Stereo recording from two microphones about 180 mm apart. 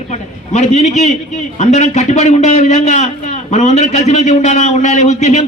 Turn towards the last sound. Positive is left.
turn(degrees=40)  # may be behind; listen again after turning